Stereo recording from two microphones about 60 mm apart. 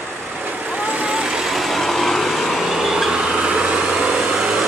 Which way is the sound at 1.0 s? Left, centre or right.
Centre.